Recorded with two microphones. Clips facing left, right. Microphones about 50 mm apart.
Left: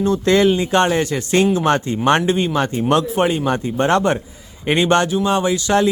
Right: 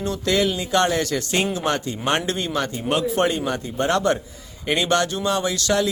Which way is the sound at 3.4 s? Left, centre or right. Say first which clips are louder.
Left 5 dB; left.